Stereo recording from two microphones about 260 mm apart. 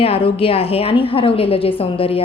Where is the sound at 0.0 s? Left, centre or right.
Left.